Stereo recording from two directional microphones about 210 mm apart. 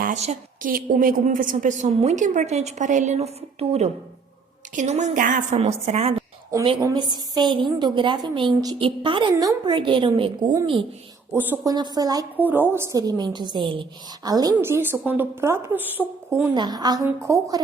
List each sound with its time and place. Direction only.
0.0 s a woman's voice: 35° right (ahead or behind)
6.5 s a woman's voice: 15° right (ahead or behind)